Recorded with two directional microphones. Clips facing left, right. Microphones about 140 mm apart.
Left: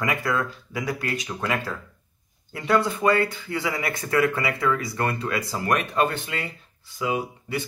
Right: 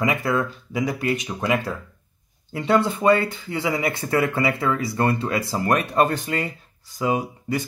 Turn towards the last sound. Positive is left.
turn(degrees=-40)  # may be behind; listen again after turning